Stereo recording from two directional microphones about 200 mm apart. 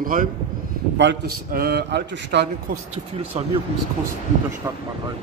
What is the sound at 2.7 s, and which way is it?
Speech, 30° right (ahead or behind).